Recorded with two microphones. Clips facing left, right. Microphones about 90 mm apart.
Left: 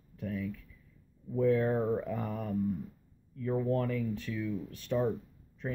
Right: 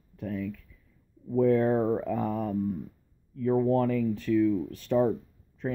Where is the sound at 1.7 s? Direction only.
30° right (ahead or behind).